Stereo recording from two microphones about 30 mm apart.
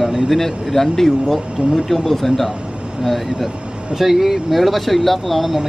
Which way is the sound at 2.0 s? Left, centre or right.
Centre.